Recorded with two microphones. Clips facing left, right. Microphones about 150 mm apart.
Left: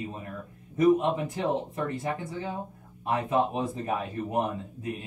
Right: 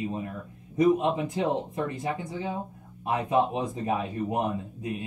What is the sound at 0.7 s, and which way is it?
Speech, 20° right (ahead or behind).